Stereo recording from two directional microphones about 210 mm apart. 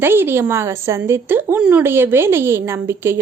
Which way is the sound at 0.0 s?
10° right (ahead or behind).